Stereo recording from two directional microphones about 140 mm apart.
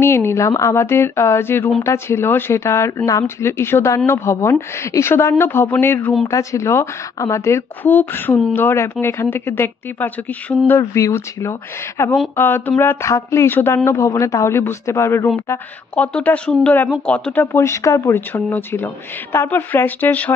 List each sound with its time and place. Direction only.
0.0 s a woman's voice: 20° left (ahead or behind)